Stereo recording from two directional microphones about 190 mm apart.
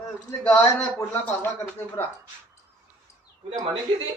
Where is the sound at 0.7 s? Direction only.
15° left (ahead or behind).